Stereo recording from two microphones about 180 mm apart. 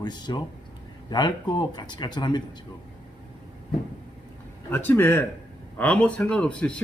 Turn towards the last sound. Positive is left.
turn(degrees=5)  # may be behind; listen again after turning